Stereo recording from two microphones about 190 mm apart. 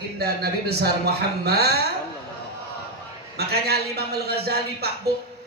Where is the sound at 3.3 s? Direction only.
55° right (ahead or behind).